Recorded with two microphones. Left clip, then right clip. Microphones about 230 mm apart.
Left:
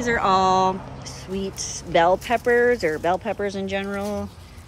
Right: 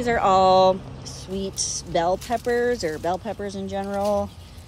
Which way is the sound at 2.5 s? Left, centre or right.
Left.